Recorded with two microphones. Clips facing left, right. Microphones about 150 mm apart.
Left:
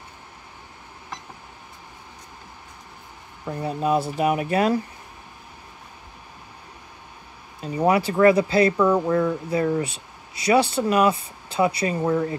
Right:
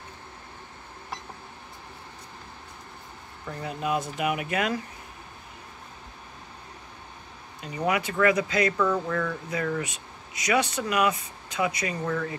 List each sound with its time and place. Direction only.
3.4 s speech: 35° left (ahead or behind)
7.6 s speech: 30° left (ahead or behind)